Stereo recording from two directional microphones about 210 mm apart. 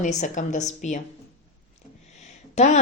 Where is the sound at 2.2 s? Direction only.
35° left (ahead or behind).